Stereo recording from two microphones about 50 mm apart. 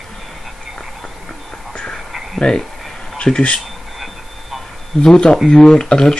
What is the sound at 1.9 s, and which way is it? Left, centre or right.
Whispering, centre.